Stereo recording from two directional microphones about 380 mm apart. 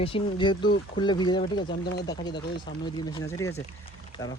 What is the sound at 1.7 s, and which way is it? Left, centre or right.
Speech, left.